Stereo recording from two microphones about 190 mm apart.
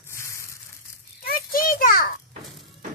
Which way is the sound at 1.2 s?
50° left (ahead or behind).